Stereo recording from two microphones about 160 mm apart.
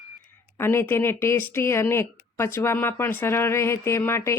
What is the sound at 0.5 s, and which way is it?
Speech, 15° left (ahead or behind).